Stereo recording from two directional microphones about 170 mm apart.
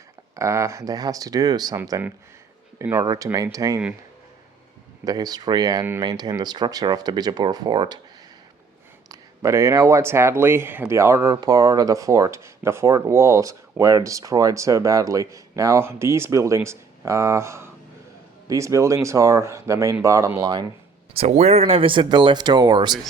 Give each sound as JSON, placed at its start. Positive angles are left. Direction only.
{"t": 0.3, "sound": "speech", "side_deg": -15}
{"t": 5.0, "sound": "speech", "side_deg": -20}
{"t": 9.0, "sound": "speech", "side_deg": -20}
{"t": 21.1, "sound": "speech", "side_deg": -40}